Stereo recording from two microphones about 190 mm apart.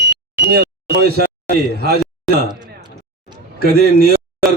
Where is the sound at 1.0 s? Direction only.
55° right (ahead or behind).